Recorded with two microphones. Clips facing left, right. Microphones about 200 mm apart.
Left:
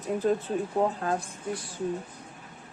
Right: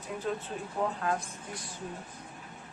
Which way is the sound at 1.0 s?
35° left (ahead or behind).